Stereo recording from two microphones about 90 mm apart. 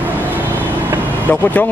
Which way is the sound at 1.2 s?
20° left (ahead or behind).